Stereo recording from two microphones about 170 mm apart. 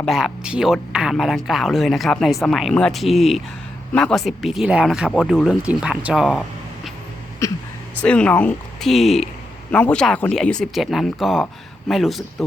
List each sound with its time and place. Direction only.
0.0 s speech: centre (ahead or behind)
7.4 s speech: 20° left (ahead or behind)
8.0 s speech: 5° left (ahead or behind)